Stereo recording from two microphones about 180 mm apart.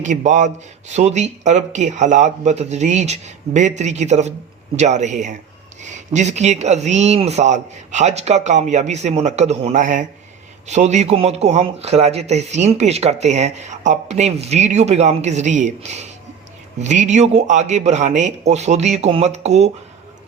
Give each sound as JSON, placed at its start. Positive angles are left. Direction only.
{"t": 0.0, "sound": "speech", "side_deg": -40}